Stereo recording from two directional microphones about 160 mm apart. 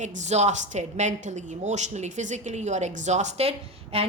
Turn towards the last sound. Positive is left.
turn(degrees=-40)  # may be behind; listen again after turning